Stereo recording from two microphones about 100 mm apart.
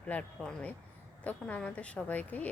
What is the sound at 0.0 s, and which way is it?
A woman's voice, 10° left (ahead or behind).